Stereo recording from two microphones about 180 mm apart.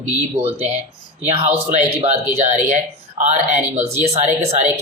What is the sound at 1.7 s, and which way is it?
Speech, 40° right (ahead or behind).